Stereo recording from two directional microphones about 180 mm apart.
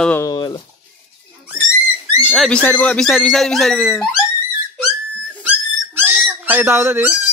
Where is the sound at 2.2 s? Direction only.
Centre (ahead or behind).